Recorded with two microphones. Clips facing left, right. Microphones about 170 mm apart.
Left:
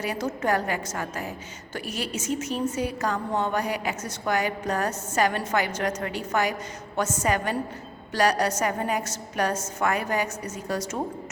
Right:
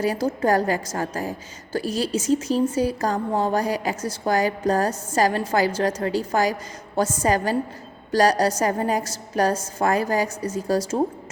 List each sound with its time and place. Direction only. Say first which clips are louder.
0.0 s a woman's voice: right 6 dB; 35° right (ahead or behind)